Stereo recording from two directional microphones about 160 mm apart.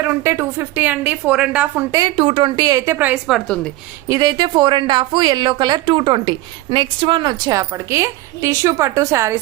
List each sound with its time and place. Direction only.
0.0 s a woman's voice: 15° right (ahead or behind)
1.9 s a woman's voice: 25° right (ahead or behind)
2.1 s a woman's voice: 35° right (ahead or behind); by 3.7 s 5° left (ahead or behind)
4.1 s a woman's voice: 25° right (ahead or behind)